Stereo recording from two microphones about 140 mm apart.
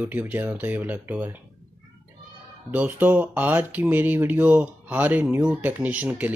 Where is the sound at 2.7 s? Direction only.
10° right (ahead or behind).